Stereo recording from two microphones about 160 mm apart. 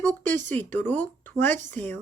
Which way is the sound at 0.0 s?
10° left (ahead or behind).